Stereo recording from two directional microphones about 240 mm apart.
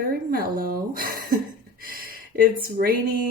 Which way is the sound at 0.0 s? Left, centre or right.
Right.